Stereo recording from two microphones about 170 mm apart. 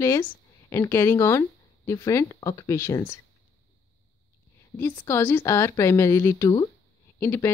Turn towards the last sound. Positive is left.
turn(degrees=15)  # may be behind; listen again after turning